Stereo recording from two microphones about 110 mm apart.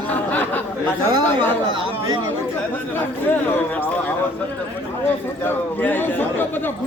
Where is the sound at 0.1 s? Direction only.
15° left (ahead or behind).